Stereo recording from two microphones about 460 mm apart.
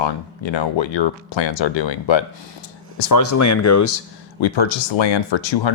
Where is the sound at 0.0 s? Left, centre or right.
Left.